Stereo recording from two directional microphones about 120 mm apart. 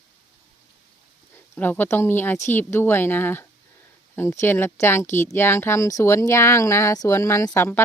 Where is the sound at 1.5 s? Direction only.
15° left (ahead or behind).